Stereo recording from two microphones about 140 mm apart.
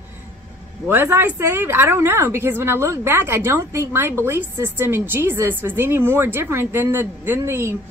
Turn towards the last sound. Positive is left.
turn(degrees=-20)  # may be behind; listen again after turning